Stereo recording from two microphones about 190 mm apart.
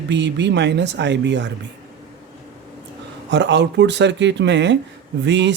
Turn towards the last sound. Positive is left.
turn(degrees=-70)  # may be behind; listen again after turning